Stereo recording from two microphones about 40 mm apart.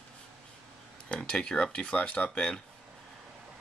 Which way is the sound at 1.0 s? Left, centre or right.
Left.